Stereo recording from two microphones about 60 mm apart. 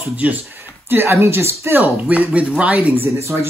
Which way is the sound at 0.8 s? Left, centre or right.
Right.